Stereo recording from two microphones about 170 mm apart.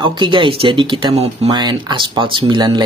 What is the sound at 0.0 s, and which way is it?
Speech, 30° right (ahead or behind).